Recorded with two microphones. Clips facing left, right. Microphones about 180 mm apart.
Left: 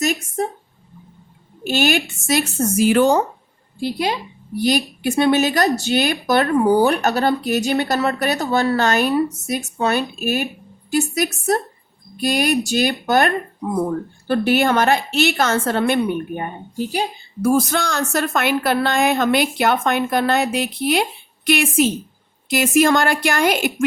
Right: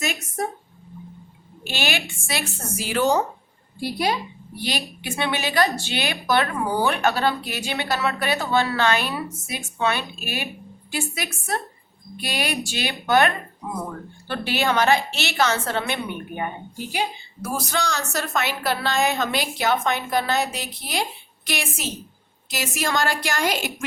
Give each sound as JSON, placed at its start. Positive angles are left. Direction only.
{"t": 1.6, "sound": "speech", "side_deg": 45}
{"t": 4.5, "sound": "speech", "side_deg": 45}
{"t": 17.7, "sound": "a woman's voice", "side_deg": 55}